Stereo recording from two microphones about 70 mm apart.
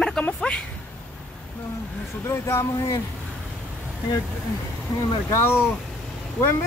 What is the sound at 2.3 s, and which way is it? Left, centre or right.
Speech, left.